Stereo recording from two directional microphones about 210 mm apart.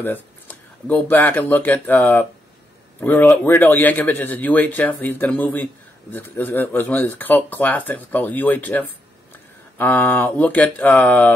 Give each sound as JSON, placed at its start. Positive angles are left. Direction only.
{"t": 0.0, "sound": "a man's voice", "side_deg": 10}